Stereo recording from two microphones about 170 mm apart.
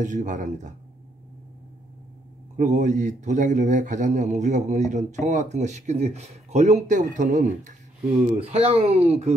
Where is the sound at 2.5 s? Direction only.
50° right (ahead or behind).